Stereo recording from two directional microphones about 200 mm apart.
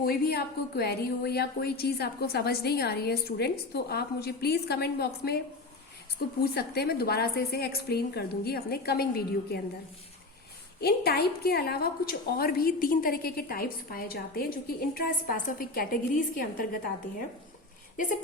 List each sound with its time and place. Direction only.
0.0 s a woman's voice: 50° left (ahead or behind)
10.8 s a woman's voice: 55° left (ahead or behind)